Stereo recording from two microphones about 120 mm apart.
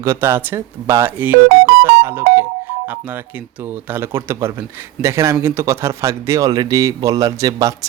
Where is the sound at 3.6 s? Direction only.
15° right (ahead or behind).